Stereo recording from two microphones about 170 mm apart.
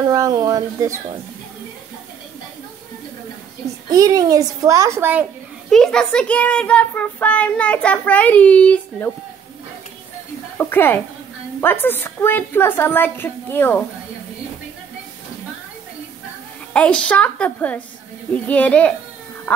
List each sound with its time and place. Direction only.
0.1 s a child's voice: 20° right (ahead or behind)
3.9 s a child's voice: 20° right (ahead or behind)
5.7 s a child's voice: 5° left (ahead or behind)
10.6 s a woman's voice: 10° left (ahead or behind)
16.7 s a child's voice: 5° left (ahead or behind)